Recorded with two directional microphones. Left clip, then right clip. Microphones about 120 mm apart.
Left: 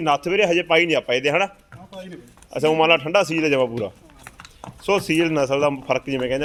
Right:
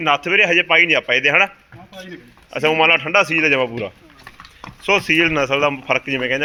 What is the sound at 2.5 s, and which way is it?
A man's voice, 15° left (ahead or behind).